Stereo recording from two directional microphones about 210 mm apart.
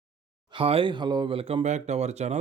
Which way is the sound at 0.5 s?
25° right (ahead or behind).